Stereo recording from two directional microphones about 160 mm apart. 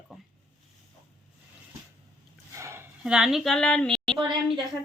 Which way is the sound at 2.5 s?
15° right (ahead or behind).